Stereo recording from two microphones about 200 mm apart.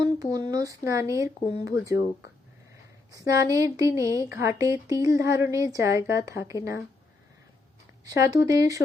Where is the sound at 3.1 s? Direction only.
15° right (ahead or behind).